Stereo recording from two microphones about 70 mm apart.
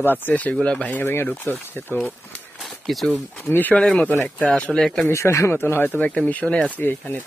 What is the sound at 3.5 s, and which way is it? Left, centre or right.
Speech, left.